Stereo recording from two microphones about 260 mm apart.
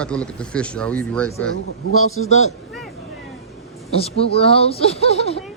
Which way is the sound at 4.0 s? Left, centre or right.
Left.